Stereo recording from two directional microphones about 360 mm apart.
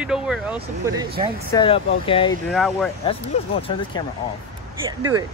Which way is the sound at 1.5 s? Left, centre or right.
Centre.